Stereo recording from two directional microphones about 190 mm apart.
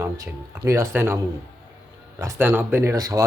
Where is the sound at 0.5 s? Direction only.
15° right (ahead or behind).